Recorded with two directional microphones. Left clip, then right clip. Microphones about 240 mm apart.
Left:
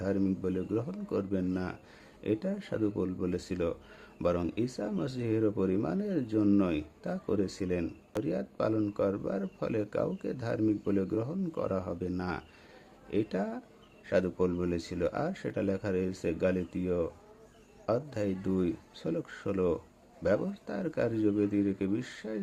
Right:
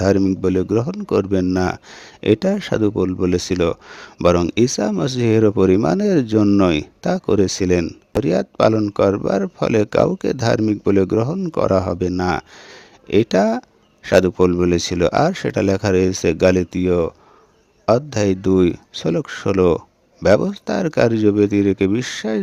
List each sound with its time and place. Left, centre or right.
0.0 s speech: right